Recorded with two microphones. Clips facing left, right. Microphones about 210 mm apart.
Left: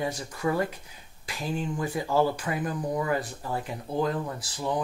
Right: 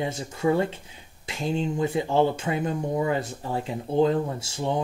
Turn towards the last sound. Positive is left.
turn(degrees=-25)  # may be behind; listen again after turning